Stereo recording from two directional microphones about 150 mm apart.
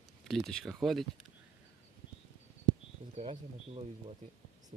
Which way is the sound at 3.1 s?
45° right (ahead or behind).